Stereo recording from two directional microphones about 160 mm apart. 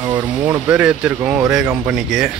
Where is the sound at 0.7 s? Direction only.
5° right (ahead or behind).